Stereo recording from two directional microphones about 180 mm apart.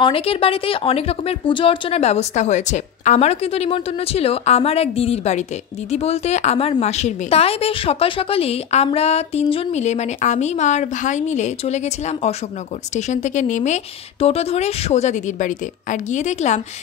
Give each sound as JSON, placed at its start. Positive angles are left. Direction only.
{"t": 0.0, "sound": "a woman's voice", "side_deg": 30}